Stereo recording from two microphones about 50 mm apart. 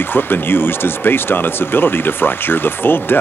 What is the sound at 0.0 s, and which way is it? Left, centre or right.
Speech, left.